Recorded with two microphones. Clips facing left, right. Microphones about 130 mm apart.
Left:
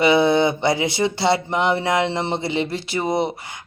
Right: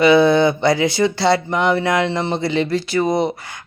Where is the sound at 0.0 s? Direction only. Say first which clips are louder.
Right 4 dB; 25° left (ahead or behind).